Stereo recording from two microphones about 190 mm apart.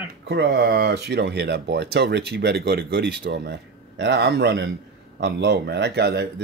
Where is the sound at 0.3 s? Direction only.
60° right (ahead or behind).